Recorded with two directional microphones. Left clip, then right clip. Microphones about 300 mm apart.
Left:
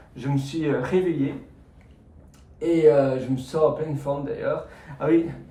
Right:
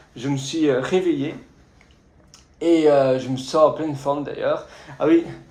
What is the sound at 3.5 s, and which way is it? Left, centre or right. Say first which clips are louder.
Speech: right 5 dB; centre.